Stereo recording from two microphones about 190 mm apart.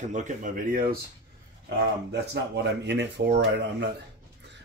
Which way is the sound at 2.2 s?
65° right (ahead or behind).